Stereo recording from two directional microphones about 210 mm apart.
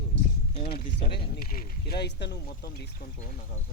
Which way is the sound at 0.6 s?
45° left (ahead or behind).